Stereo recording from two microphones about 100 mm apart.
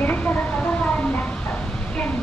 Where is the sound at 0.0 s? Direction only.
15° left (ahead or behind).